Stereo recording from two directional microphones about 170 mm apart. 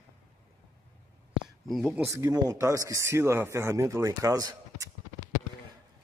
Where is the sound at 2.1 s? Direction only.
20° right (ahead or behind).